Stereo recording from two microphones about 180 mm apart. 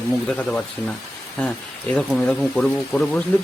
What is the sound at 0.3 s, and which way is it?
Speech, 5° left (ahead or behind).